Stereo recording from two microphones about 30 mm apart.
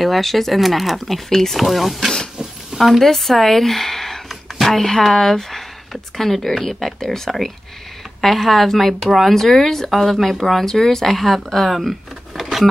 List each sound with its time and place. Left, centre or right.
0.0 s speech: centre
1.0 s speech: centre
1.6 s speech: centre
2.7 s a sound: right
3.2 s speech: centre